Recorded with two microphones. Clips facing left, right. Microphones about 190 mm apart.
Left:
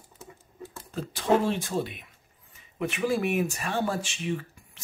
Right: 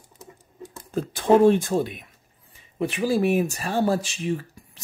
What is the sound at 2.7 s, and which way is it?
Speech, 35° right (ahead or behind).